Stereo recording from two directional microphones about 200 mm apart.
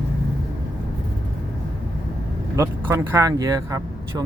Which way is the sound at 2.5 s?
15° right (ahead or behind).